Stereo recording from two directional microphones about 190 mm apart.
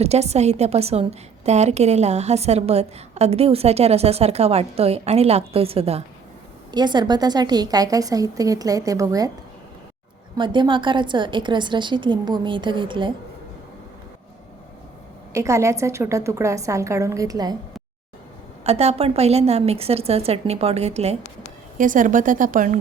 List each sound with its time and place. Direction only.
0.0 s a woman's voice: 35° right (ahead or behind); by 9.3 s 20° right (ahead or behind)
10.3 s a woman's voice: 25° right (ahead or behind)
15.3 s a woman's voice: 15° right (ahead or behind)
18.6 s a woman's voice: 35° right (ahead or behind)